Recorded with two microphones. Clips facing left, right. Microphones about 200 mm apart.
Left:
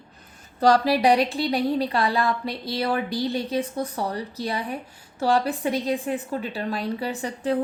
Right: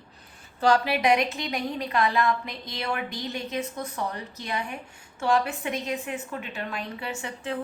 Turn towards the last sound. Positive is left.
turn(degrees=35)  # may be behind; listen again after turning